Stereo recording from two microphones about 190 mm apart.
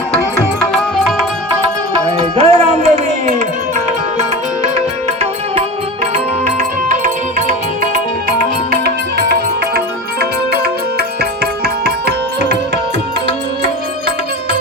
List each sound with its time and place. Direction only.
2.1 s a sound: 30° right (ahead or behind)
6.6 s music: 40° right (ahead or behind)
9.3 s music: 55° right (ahead or behind)